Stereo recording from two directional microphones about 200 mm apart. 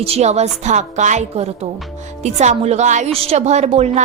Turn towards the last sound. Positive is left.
turn(degrees=-35)  # may be behind; listen again after turning